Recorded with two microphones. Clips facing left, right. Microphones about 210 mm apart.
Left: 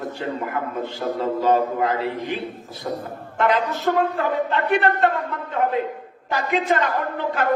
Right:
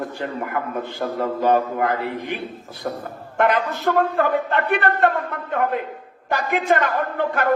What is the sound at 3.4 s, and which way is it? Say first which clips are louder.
A man's voice: right 1 dB; 55° right (ahead or behind).